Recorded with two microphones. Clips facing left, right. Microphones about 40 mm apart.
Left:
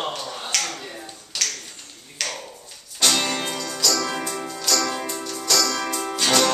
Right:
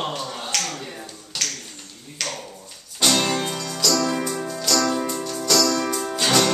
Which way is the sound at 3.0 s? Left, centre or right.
Centre.